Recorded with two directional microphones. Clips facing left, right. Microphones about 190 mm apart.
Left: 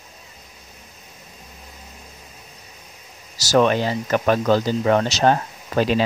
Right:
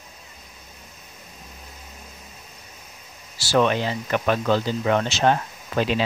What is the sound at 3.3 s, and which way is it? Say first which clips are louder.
Speech: left 3 dB; 40° left (ahead or behind).